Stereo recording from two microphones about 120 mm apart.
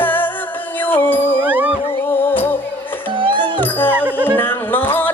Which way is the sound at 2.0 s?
15° left (ahead or behind).